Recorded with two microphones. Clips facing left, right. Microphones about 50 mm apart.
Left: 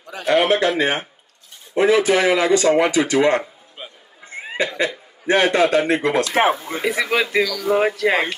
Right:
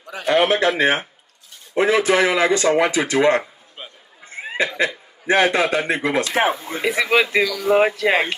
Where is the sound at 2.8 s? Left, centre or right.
Centre.